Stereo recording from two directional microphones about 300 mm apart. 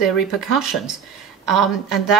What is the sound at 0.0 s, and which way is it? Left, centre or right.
Speech, centre.